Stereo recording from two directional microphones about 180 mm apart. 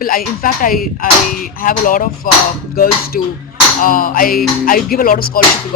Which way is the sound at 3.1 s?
50° left (ahead or behind).